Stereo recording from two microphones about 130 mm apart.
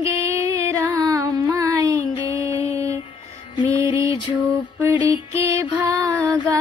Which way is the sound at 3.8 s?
25° right (ahead or behind).